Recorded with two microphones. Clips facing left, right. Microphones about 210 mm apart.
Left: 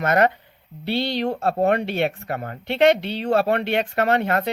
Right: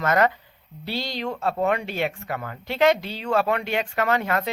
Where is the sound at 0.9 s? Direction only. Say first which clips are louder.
Left 6 dB; 65° left (ahead or behind).